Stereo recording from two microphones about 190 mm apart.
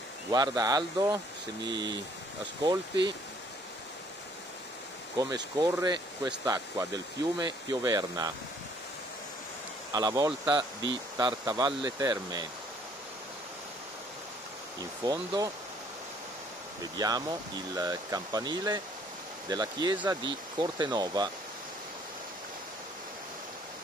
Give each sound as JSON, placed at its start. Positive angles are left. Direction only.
{"t": 0.3, "sound": "speech", "side_deg": -20}
{"t": 5.1, "sound": "speech", "side_deg": -20}
{"t": 9.9, "sound": "speech", "side_deg": -20}
{"t": 15.0, "sound": "speech", "side_deg": -20}
{"t": 16.9, "sound": "speech", "side_deg": -20}